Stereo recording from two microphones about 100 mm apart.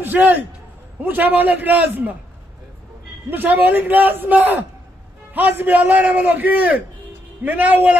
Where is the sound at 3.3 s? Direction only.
20° right (ahead or behind).